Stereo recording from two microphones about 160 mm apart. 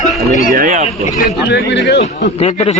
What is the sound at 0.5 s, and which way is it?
Speech, 50° right (ahead or behind).